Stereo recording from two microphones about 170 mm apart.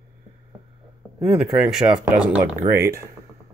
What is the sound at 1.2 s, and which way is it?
Speech, centre (ahead or behind).